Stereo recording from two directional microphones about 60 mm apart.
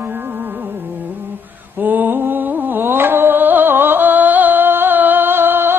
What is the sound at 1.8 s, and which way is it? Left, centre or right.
Music, right.